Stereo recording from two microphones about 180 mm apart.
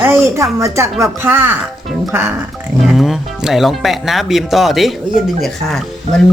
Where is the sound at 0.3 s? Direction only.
15° right (ahead or behind).